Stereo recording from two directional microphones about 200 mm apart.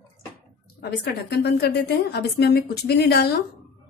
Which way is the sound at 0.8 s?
55° left (ahead or behind).